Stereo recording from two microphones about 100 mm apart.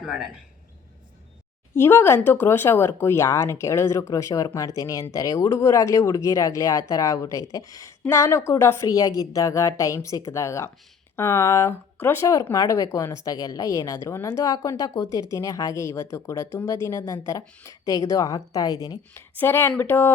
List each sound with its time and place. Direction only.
0.0 s speech: 5° right (ahead or behind)
1.7 s speech: 25° left (ahead or behind)
12.5 s speech: 35° left (ahead or behind)
19.4 s speech: 20° left (ahead or behind)